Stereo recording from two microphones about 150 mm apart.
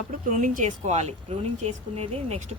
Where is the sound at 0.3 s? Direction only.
60° right (ahead or behind).